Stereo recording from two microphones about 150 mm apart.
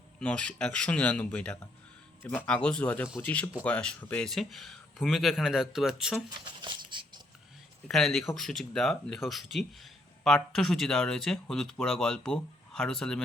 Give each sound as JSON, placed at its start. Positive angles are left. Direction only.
{"t": 0.2, "sound": "speech", "side_deg": 5}
{"t": 6.4, "sound": "a sound", "side_deg": -30}
{"t": 7.9, "sound": "speech", "side_deg": 0}